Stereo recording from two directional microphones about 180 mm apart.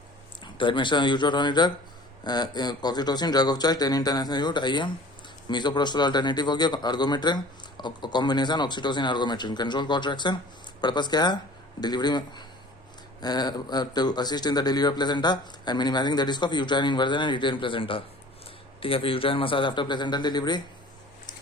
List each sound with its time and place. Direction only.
0.6 s a man's voice: 25° left (ahead or behind)